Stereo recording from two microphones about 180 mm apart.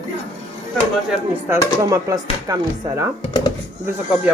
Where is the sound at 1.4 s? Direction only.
20° right (ahead or behind).